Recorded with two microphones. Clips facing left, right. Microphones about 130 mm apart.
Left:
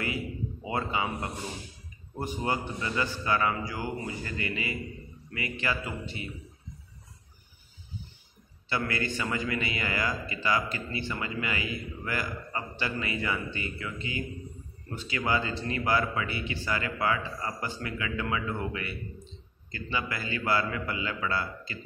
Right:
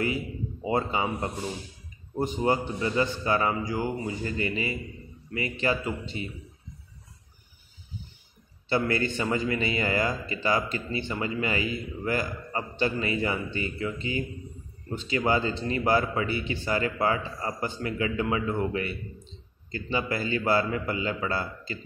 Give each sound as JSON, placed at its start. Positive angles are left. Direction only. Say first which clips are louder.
{"t": 0.7, "sound": "a man's voice", "louder": "right 4 dB", "side_deg": -30}
{"t": 8.6, "sound": "a man's voice", "louder": "right 5 dB", "side_deg": -30}